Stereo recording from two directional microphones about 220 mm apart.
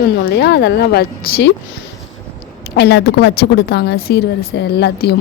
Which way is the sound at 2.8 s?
50° left (ahead or behind).